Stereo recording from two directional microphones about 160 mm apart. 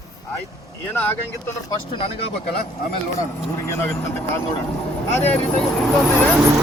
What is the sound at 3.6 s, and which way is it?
Speech, 15° left (ahead or behind).